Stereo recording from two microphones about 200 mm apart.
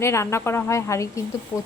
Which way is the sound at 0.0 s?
15° left (ahead or behind).